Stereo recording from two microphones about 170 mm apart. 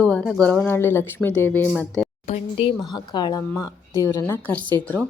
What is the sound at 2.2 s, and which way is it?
Speech, 35° left (ahead or behind).